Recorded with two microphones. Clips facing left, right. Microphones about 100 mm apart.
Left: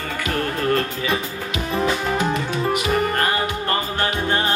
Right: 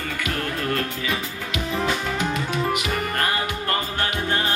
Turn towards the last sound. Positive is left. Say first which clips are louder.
# left 3 dB
turn(degrees=35)  # may be behind; listen again after turning